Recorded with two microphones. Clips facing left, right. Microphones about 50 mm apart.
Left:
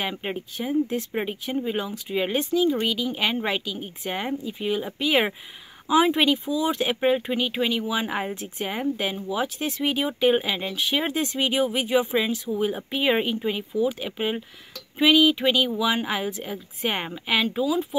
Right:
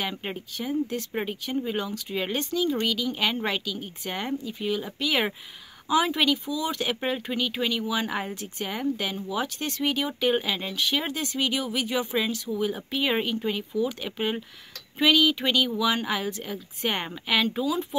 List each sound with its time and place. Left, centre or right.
0.0 s speech: centre